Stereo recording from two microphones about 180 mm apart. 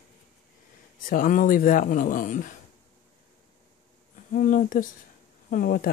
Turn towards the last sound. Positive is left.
turn(degrees=50)  # may be behind; listen again after turning